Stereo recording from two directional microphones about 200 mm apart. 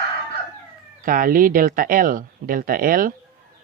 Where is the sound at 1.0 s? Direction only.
45° right (ahead or behind).